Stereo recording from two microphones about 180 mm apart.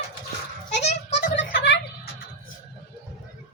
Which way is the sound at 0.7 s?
40° left (ahead or behind).